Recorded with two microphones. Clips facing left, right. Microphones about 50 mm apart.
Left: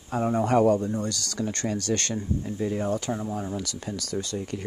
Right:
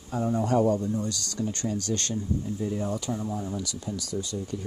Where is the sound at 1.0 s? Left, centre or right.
Left.